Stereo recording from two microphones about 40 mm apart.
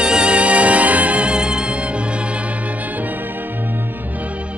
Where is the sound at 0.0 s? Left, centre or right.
Right.